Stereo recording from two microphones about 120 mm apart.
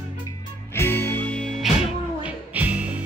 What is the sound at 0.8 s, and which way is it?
Music, 20° left (ahead or behind).